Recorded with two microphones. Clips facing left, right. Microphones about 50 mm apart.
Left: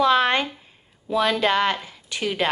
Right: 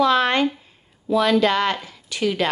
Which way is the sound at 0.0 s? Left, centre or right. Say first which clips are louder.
Right 1 dB; left.